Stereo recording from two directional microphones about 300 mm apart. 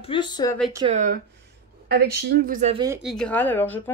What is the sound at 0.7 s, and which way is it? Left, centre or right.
A woman's voice, right.